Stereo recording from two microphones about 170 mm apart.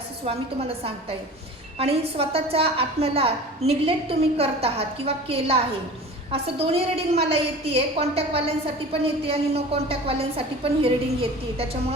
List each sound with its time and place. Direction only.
1.8 s a woman's voice: 35° right (ahead or behind)